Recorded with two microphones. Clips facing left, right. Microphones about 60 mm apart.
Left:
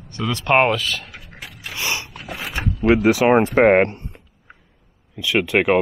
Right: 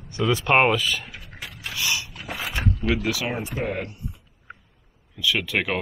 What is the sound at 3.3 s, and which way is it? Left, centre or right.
Speech, left.